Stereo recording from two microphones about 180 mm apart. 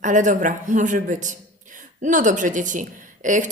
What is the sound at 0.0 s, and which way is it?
A woman's voice, 45° right (ahead or behind).